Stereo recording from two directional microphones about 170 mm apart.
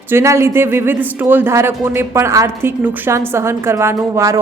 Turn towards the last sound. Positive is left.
turn(degrees=-15)  # may be behind; listen again after turning